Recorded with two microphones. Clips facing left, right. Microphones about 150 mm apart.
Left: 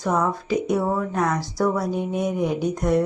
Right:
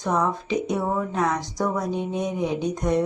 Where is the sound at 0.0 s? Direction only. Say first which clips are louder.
Left 1 dB; 5° left (ahead or behind).